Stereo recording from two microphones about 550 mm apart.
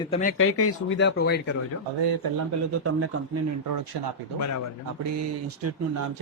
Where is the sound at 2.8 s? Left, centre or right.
Right.